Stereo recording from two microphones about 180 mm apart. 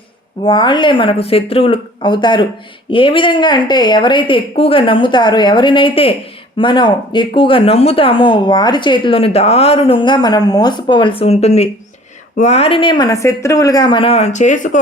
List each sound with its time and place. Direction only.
0.4 s speech: 25° left (ahead or behind); by 14.8 s 45° left (ahead or behind)